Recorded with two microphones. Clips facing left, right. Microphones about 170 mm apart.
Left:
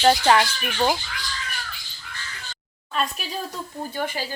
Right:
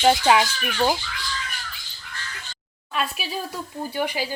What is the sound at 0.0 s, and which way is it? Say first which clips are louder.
Speech: even; 5° right (ahead or behind).